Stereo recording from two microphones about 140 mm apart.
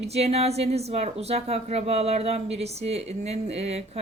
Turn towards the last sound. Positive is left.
turn(degrees=-50)  # may be behind; listen again after turning